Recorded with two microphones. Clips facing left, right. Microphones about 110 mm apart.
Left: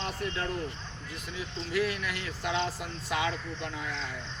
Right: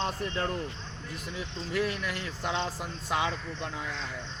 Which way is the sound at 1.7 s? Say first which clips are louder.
Even; 40° right (ahead or behind).